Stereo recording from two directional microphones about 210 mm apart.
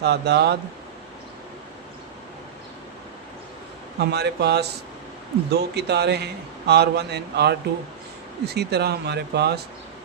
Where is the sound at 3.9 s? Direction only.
50° right (ahead or behind).